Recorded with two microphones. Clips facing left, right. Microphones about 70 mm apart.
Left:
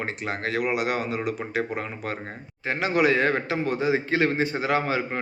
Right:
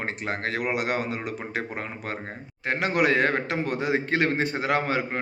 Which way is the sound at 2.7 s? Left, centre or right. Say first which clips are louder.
Left 1 dB; right.